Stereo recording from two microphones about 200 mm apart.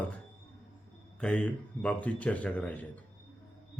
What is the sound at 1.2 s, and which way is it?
A man's voice, 5° left (ahead or behind).